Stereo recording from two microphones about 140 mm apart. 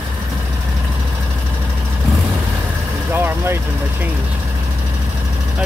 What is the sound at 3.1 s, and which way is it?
Vehicle, 15° right (ahead or behind).